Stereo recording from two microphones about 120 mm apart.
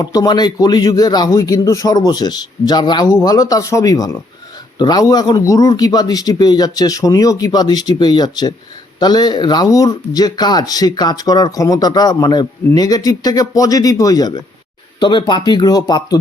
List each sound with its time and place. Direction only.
0.0 s speech: 30° left (ahead or behind)